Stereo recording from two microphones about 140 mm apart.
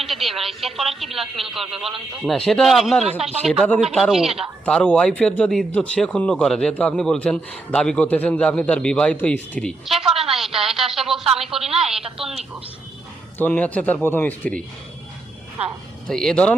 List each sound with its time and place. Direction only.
0.0 s speech: centre (ahead or behind)
3.1 s speech: 45° right (ahead or behind)
3.4 s speech: centre (ahead or behind)
4.6 s speech: 10° left (ahead or behind)
13.4 s speech: 10° left (ahead or behind)
16.0 s speech: 5° left (ahead or behind)